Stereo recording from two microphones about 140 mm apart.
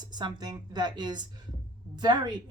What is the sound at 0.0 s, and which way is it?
Speech, 30° right (ahead or behind).